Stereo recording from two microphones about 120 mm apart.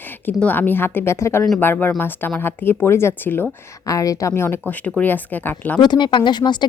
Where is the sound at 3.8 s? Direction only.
30° left (ahead or behind).